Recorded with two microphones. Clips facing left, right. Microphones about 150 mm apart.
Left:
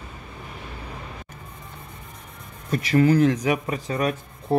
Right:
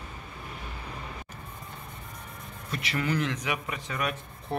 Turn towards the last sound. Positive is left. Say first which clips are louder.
# left 8 dB
turn(degrees=35)  # may be behind; listen again after turning